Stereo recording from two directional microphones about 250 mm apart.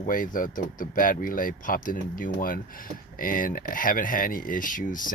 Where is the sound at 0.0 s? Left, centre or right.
Left.